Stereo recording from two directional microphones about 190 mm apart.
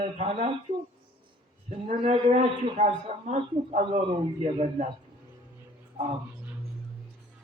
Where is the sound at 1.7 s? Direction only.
35° right (ahead or behind).